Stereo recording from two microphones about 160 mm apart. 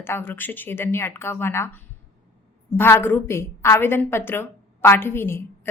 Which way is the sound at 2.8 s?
15° left (ahead or behind).